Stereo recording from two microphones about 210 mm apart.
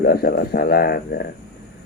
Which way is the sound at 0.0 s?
50° left (ahead or behind).